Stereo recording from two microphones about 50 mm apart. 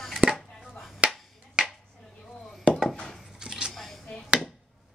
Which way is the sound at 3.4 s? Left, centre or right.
Centre.